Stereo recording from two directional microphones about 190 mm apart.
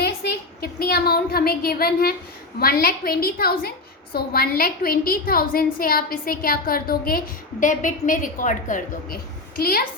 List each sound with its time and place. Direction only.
0.0 s a woman's voice: 55° left (ahead or behind)